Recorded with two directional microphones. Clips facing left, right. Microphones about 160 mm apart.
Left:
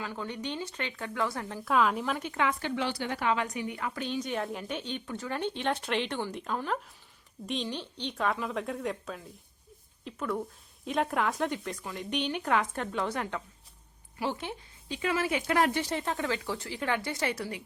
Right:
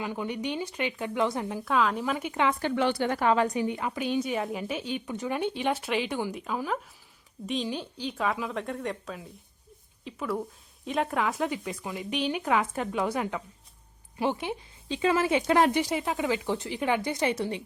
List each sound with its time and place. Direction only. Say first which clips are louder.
0.0 s speech: right 5 dB; 15° right (ahead or behind)
1.6 s a woman's voice: even; centre (ahead or behind)
2.3 s speech: right 3 dB; 25° right (ahead or behind)
2.6 s a woman's voice: right 6 dB; 50° right (ahead or behind); by 4.0 s 20° right (ahead or behind)
4.0 s a woman's voice: right 5 dB; 10° right (ahead or behind)
15.8 s speech: right 3 dB; 10° right (ahead or behind)